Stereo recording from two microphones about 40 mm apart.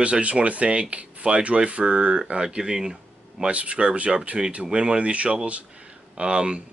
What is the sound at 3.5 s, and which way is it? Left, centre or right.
Speech, right.